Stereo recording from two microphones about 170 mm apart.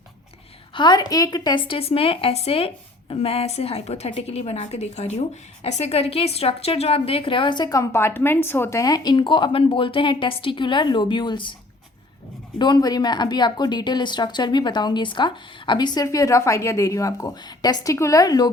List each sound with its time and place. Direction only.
0.7 s a woman's voice: 25° left (ahead or behind)
12.5 s speech: 25° left (ahead or behind)